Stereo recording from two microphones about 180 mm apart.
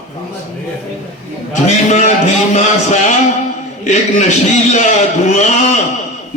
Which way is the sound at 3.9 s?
40° left (ahead or behind).